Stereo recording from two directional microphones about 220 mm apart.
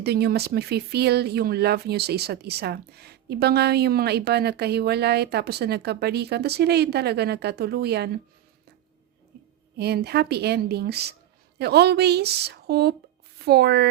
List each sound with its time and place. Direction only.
0.0 s speech: 45° right (ahead or behind)
9.7 s speech: 50° right (ahead or behind)